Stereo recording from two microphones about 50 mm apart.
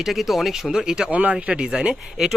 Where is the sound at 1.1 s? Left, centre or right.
Right.